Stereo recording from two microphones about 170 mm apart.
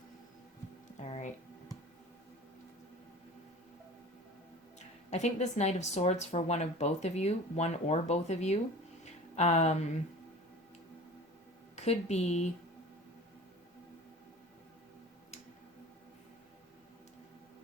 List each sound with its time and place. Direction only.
0.9 s a sound: 40° left (ahead or behind)
5.1 s speech: 40° left (ahead or behind)
11.9 s speech: 40° left (ahead or behind)